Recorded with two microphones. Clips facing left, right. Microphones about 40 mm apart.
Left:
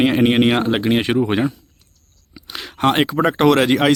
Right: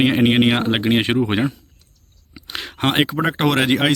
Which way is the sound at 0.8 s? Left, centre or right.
Right.